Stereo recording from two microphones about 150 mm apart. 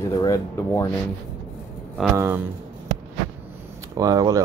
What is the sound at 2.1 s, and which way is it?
Speech, 20° right (ahead or behind).